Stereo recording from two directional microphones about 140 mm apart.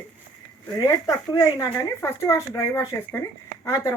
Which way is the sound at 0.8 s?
25° left (ahead or behind).